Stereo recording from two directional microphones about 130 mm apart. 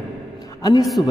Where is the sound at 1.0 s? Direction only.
35° left (ahead or behind).